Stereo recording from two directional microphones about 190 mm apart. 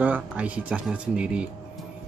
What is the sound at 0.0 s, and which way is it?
Speech, 10° right (ahead or behind).